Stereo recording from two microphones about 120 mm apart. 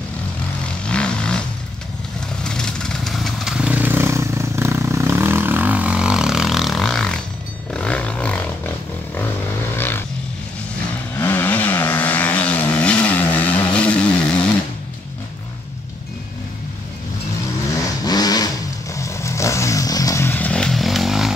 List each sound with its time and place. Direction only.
0.8 s vehicle: 10° left (ahead or behind)
2.4 s vehicle: 5° left (ahead or behind)
7.7 s a sound: 10° left (ahead or behind)
9.8 s vehicle: 20° left (ahead or behind)
11.1 s vehicle: 15° left (ahead or behind)
18.0 s vehicle: 35° left (ahead or behind)
20.3 s chainsaw: 10° left (ahead or behind)